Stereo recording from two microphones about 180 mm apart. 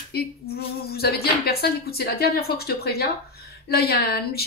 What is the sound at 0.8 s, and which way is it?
A woman's voice, 60° left (ahead or behind).